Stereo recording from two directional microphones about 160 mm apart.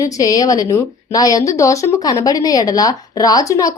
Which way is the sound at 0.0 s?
20° left (ahead or behind).